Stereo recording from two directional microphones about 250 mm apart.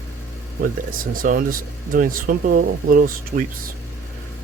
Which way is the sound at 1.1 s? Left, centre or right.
Right.